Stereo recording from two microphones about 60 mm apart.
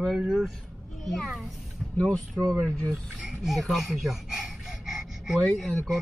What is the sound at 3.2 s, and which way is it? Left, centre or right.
Speech, centre.